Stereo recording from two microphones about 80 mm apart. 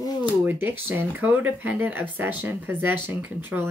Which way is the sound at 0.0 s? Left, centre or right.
Left.